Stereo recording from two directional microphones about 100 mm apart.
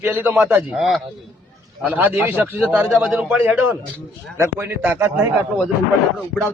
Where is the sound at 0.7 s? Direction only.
Centre (ahead or behind).